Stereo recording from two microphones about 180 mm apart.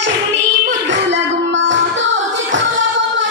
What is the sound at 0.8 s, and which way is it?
Music, 80° right.